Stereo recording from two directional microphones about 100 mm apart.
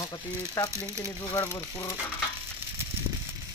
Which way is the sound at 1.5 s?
30° left (ahead or behind).